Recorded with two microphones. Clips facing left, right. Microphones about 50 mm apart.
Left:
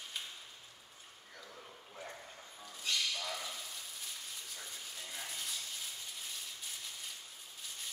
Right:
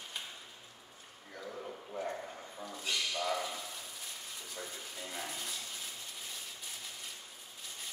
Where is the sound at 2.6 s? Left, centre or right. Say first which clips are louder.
Even; centre.